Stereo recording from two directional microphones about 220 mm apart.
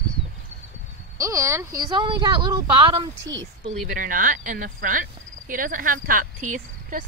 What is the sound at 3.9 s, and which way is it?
Speech, 40° right (ahead or behind).